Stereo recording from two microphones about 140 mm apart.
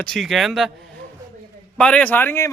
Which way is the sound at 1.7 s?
10° left (ahead or behind).